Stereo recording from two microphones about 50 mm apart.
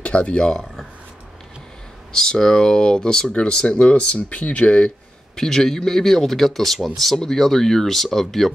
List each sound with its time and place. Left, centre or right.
0.0 s speech: left
2.1 s speech: centre
5.4 s speech: centre